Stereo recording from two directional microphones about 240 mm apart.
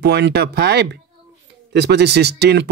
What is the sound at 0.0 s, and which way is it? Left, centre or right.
Speech, right.